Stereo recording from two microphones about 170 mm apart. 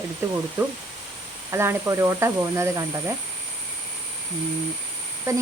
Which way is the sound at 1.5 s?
15° right (ahead or behind).